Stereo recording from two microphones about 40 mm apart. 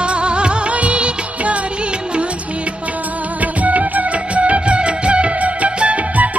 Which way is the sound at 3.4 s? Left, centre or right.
Right.